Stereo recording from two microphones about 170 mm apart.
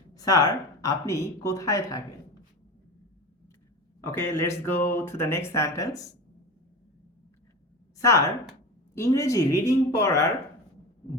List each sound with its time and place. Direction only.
0.1 s speech: 20° left (ahead or behind)
4.0 s speech: 15° left (ahead or behind)
7.9 s a woman's voice: 20° left (ahead or behind)